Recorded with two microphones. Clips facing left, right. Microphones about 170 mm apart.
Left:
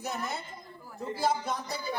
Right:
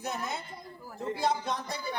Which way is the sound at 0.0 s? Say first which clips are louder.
Even; centre (ahead or behind).